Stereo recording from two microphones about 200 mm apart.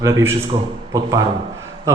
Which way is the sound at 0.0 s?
15° right (ahead or behind).